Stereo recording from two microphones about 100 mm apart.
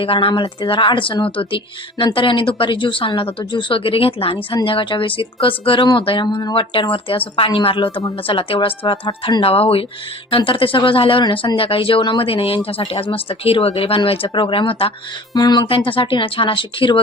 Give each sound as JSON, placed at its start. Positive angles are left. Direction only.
{"t": 0.0, "sound": "speech", "side_deg": 65}
{"t": 10.3, "sound": "speech", "side_deg": 60}
{"t": 15.3, "sound": "speech", "side_deg": 45}
{"t": 15.6, "sound": "speech", "side_deg": 65}